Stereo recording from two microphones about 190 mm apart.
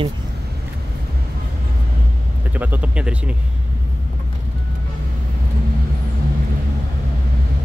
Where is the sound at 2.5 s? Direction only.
10° right (ahead or behind).